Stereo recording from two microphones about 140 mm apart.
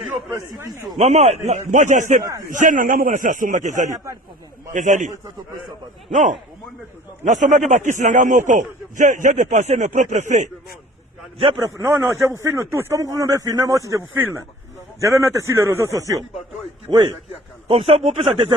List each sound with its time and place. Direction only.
0.9 s a man's voice: 55° right (ahead or behind)
3.8 s speech: 20° right (ahead or behind)
4.7 s a man's voice: 65° right (ahead or behind)
11.3 s a man's voice: 35° right (ahead or behind)
11.6 s speech: 20° right (ahead or behind)
16.9 s a man's voice: 35° right (ahead or behind)
17.7 s speech: 45° right (ahead or behind)